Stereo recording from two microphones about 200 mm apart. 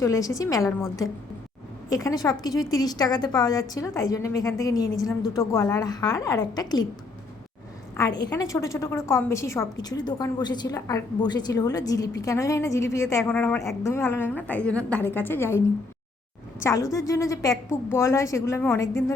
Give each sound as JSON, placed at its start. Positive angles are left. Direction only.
{"t": 0.0, "sound": "a woman's voice", "side_deg": 15}
{"t": 8.0, "sound": "a woman's voice", "side_deg": 15}